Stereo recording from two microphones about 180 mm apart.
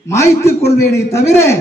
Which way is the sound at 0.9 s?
15° left (ahead or behind).